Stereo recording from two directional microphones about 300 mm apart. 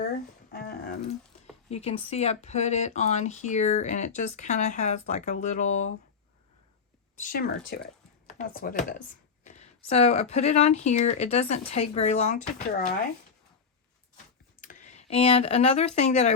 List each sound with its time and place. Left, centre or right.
0.5 s speech: left
7.2 s speech: left
14.6 s a sound: left
16.0 s speech: left